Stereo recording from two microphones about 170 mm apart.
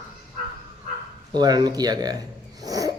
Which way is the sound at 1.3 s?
25° right (ahead or behind).